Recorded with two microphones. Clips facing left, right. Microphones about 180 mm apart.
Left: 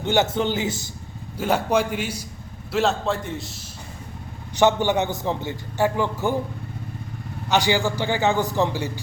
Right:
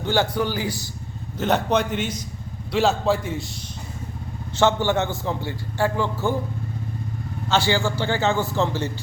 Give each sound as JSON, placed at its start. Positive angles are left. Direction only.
{"t": 0.0, "sound": "a man's voice", "side_deg": 20}
{"t": 1.4, "sound": "a man's voice", "side_deg": 10}
{"t": 4.5, "sound": "a man's voice", "side_deg": 15}
{"t": 7.5, "sound": "a man's voice", "side_deg": 15}